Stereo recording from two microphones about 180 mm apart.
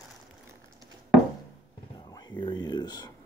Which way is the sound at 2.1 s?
25° left (ahead or behind).